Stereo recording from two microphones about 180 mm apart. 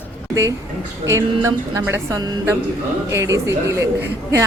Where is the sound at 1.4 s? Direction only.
15° right (ahead or behind).